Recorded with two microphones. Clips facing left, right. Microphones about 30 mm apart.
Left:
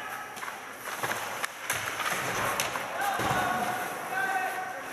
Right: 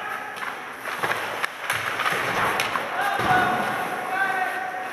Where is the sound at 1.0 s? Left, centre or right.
Right.